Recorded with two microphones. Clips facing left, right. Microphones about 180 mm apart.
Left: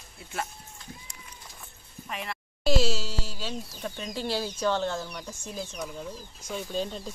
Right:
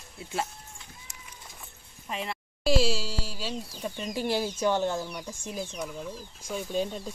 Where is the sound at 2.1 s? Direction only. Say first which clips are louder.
Right 2 dB; 25° right (ahead or behind).